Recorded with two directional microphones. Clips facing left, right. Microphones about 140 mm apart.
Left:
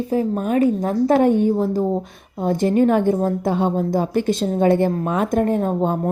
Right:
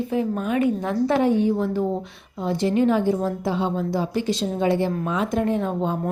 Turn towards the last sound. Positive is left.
turn(degrees=45)  # may be behind; listen again after turning